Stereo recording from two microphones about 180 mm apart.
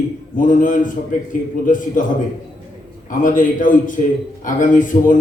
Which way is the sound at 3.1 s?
45° left (ahead or behind).